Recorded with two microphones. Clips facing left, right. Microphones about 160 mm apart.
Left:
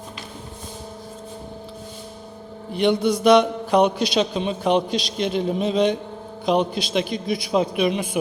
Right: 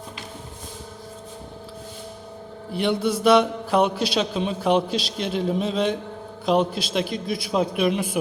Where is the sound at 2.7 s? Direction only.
5° right (ahead or behind).